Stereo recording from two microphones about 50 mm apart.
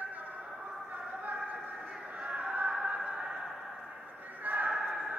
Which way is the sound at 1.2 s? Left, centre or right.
Right.